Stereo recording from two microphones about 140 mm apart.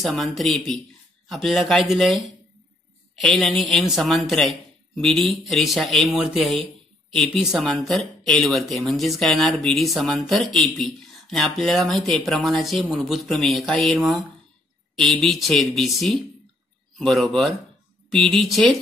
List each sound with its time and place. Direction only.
0.0 s speech: centre (ahead or behind)